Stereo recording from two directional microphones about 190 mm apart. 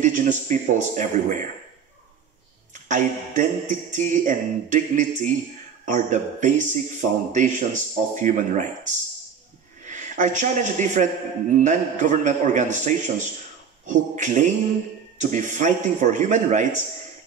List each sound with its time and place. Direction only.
0.0 s a man's voice: 40° right (ahead or behind)
2.7 s a man's voice: 40° right (ahead or behind)